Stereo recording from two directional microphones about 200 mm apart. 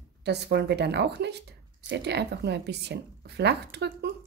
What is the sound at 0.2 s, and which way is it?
Speech, 55° right (ahead or behind).